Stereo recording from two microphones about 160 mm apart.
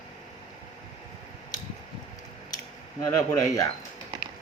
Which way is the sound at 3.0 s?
20° left (ahead or behind).